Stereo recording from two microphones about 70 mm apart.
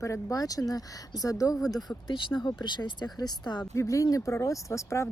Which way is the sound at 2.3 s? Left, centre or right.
Left.